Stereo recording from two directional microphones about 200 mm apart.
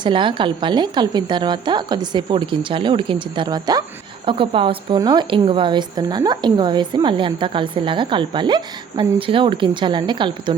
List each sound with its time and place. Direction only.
0.0 s speech: 25° right (ahead or behind)